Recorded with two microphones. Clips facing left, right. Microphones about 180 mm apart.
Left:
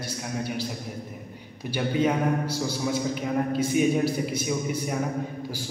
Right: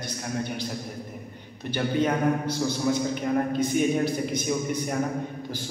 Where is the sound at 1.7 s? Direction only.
10° left (ahead or behind).